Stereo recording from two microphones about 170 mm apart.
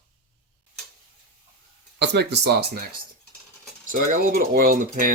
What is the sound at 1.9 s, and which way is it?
Speech, 85° right.